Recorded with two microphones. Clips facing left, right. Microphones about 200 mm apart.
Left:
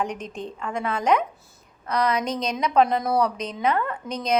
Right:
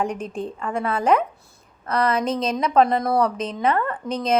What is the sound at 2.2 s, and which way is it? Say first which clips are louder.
Speech: right 4 dB; 30° right (ahead or behind).